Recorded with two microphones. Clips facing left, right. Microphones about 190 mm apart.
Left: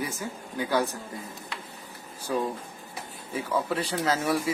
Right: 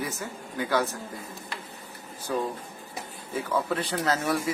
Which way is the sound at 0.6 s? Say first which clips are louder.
Even; 15° left (ahead or behind).